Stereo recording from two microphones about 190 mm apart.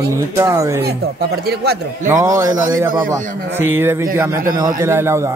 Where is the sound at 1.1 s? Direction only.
55° right (ahead or behind).